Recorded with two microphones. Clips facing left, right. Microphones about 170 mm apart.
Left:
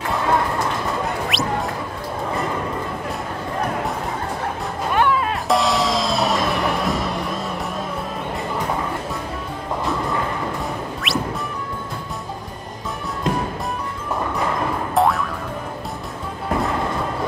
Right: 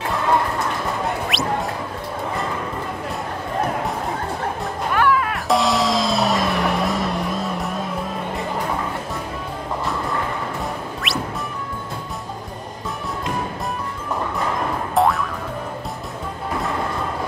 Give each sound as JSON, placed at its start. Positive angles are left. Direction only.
{"t": 1.3, "sound": "music", "side_deg": 0}
{"t": 4.9, "sound": "music", "side_deg": 20}
{"t": 5.5, "sound": "music", "side_deg": 0}
{"t": 11.0, "sound": "music", "side_deg": 0}
{"t": 15.0, "sound": "music", "side_deg": 0}